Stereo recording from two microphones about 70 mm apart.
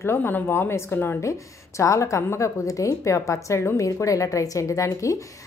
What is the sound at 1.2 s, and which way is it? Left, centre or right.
A woman's voice, left.